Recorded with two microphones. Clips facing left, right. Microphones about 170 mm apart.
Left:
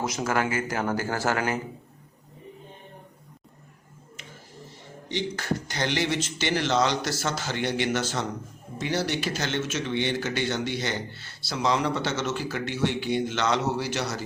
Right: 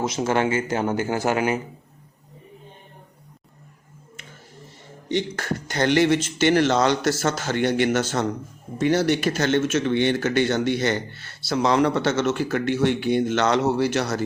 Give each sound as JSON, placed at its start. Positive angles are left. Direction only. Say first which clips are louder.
{"t": 0.0, "sound": "speech", "louder": "right 5 dB", "side_deg": -25}
{"t": 5.0, "sound": "speech", "louder": "right 4 dB", "side_deg": -55}